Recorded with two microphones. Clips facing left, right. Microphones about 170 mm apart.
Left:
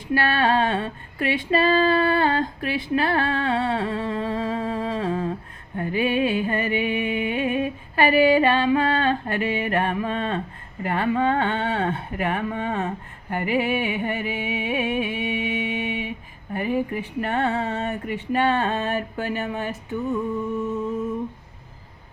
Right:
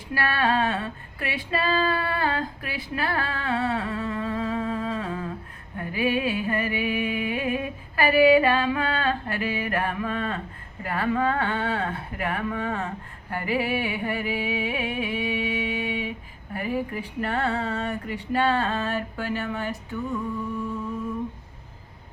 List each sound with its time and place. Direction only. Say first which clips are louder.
0.1 s female singing: left 4 dB; 25° left (ahead or behind)
5.7 s music: left 3 dB; 25° left (ahead or behind)